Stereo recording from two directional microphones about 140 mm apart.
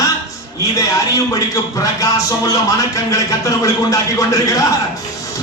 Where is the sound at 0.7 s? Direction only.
25° left (ahead or behind).